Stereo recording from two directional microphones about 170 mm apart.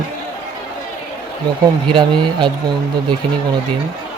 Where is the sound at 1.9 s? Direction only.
25° right (ahead or behind).